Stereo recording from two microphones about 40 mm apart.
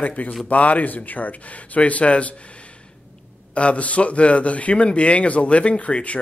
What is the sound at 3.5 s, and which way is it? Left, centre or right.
Speech, left.